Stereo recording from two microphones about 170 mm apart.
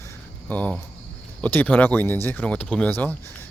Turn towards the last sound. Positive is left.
turn(degrees=10)  # may be behind; listen again after turning